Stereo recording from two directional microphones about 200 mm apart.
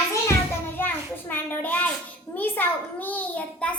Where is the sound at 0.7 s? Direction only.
10° left (ahead or behind).